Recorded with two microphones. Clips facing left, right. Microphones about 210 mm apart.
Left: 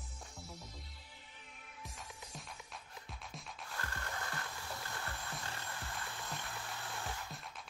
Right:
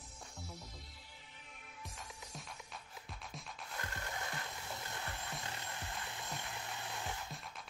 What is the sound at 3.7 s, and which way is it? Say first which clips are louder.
Music: even; 20° right (ahead or behind).